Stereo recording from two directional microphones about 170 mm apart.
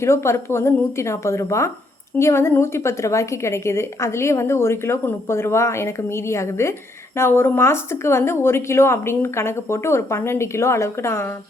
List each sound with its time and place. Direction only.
0.0 s a woman's voice: 15° left (ahead or behind)